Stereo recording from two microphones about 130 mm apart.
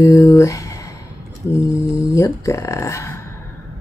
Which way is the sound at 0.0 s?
25° left (ahead or behind).